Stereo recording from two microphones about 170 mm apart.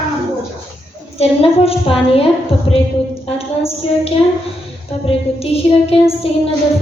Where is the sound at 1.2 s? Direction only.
35° left (ahead or behind).